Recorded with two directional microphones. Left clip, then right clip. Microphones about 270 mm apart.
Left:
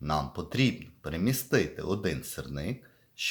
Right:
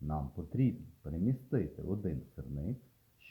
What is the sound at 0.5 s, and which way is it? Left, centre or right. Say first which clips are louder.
Speech: left 7 dB; centre.